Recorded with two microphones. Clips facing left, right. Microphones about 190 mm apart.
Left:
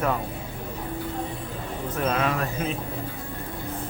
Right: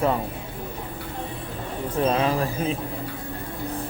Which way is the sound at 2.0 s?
30° right (ahead or behind).